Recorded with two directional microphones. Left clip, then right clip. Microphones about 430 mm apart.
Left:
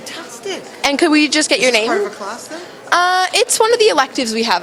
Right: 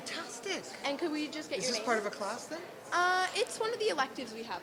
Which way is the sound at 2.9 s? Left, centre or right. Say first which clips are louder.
Left 16 dB; left.